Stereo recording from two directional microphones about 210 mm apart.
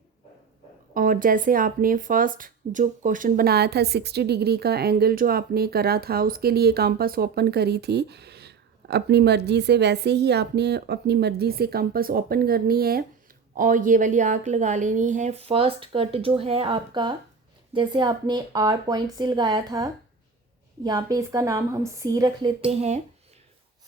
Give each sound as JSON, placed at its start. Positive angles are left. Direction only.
{"t": 0.9, "sound": "a woman's voice", "side_deg": -40}
{"t": 22.7, "sound": "speech", "side_deg": -30}